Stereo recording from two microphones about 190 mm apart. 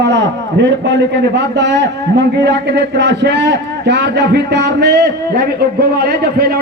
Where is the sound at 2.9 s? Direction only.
60° right (ahead or behind).